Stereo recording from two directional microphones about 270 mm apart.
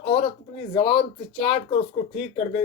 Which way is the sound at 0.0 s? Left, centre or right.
Centre.